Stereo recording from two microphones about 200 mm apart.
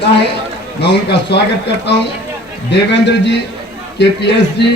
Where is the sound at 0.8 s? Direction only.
55° left (ahead or behind).